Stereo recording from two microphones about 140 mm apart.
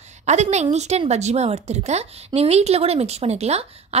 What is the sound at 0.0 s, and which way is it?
A woman's voice, 55° right (ahead or behind).